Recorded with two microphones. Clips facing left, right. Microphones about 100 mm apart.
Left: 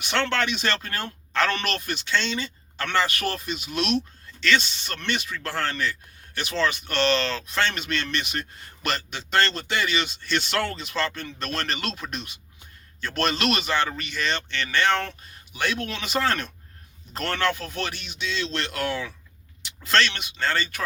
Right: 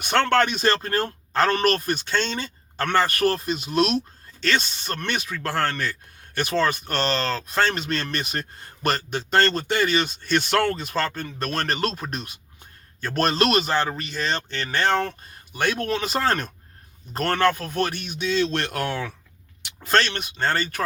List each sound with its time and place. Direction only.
0.0 s a man's voice: 45° right (ahead or behind)